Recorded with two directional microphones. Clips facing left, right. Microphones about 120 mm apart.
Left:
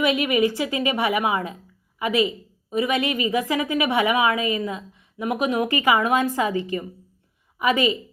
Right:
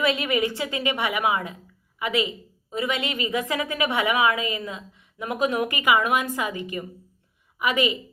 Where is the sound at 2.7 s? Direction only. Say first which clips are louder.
Left 5 dB; 25° left (ahead or behind).